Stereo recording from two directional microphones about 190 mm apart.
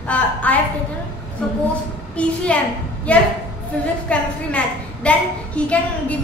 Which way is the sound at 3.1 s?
5° left (ahead or behind).